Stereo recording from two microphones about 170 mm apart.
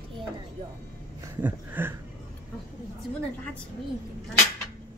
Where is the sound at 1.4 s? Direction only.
10° right (ahead or behind).